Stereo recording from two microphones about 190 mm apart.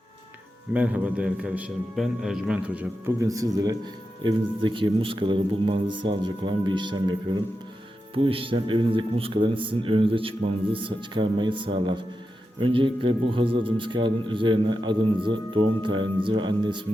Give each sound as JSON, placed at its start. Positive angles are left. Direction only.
{"t": 0.7, "sound": "a man's voice", "side_deg": -5}